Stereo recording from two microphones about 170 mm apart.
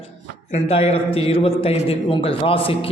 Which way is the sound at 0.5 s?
35° left (ahead or behind).